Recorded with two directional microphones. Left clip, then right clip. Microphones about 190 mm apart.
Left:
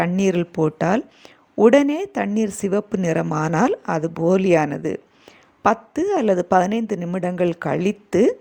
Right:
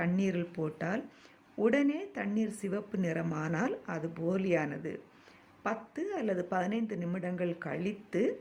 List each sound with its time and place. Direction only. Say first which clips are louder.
0.2 s a woman's voice: left 15 dB; 40° left (ahead or behind)